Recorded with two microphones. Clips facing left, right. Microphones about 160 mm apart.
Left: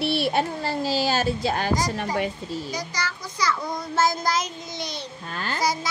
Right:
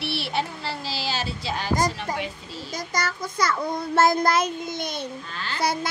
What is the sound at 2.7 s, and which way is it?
Child singing, 50° right (ahead or behind).